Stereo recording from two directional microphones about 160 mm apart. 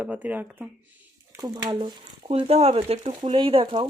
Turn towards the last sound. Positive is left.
turn(degrees=-35)  # may be behind; listen again after turning